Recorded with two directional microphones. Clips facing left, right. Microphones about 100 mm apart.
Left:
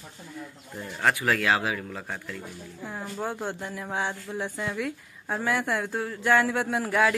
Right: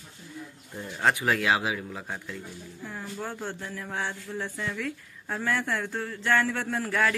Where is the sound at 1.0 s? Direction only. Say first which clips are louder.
Even; 20° right (ahead or behind).